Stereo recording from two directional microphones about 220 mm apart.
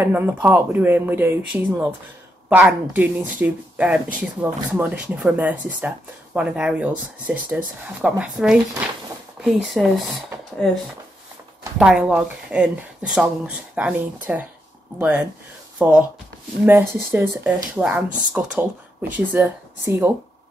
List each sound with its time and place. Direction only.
0.0 s speech: 10° right (ahead or behind)
11.8 s speech: 5° right (ahead or behind)